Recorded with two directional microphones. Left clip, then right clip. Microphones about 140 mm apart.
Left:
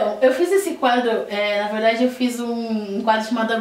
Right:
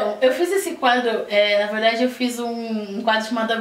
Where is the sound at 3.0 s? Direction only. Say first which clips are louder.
Left 1 dB; centre (ahead or behind).